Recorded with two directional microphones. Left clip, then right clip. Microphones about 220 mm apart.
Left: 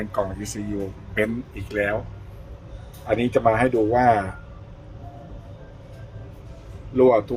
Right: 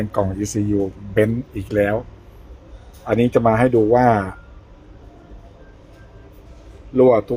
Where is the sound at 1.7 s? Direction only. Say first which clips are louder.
Right 5 dB; 20° right (ahead or behind).